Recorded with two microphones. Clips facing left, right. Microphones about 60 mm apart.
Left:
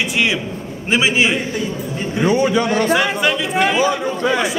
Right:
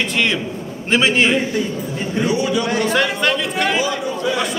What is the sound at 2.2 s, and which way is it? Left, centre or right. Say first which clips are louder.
Speech: left 4 dB; left.